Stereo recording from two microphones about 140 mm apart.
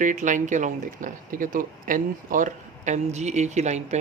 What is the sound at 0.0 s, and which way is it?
Speech, 65° right (ahead or behind).